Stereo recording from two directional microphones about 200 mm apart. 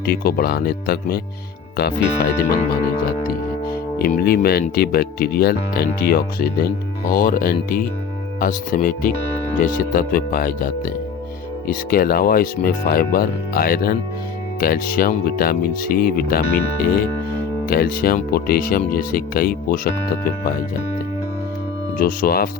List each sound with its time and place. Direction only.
0.0 s speech: 50° left (ahead or behind)
17.7 s speech: 50° left (ahead or behind)
21.9 s speech: 45° left (ahead or behind)